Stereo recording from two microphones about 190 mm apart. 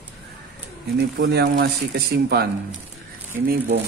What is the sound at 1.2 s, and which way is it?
Speech, 60° right (ahead or behind).